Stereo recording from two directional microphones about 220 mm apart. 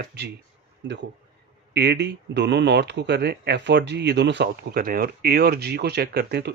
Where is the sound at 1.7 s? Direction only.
50° right (ahead or behind).